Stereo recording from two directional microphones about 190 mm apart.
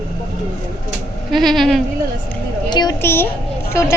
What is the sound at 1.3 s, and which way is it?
Speech, centre (ahead or behind).